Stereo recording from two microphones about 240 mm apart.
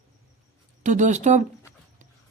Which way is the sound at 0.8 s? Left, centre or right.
Right.